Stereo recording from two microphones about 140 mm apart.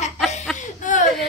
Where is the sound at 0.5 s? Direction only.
65° left (ahead or behind).